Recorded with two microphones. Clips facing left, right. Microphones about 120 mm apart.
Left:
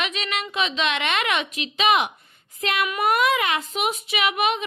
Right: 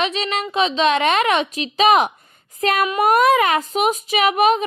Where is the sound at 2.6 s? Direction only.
40° right (ahead or behind).